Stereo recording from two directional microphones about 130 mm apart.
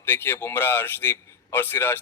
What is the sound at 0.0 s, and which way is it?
A man's voice, 15° left (ahead or behind).